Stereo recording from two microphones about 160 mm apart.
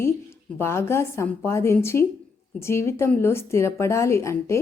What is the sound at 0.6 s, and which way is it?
A woman's voice, 15° left (ahead or behind).